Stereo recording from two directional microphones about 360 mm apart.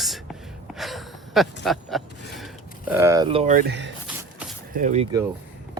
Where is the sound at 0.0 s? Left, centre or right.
Centre; by 3.9 s right.